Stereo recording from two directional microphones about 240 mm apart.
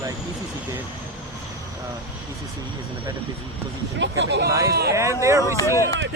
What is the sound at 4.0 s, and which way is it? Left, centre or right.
Speech, right.